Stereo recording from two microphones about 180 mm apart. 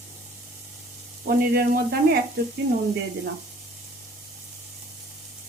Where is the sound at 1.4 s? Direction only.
55° right (ahead or behind).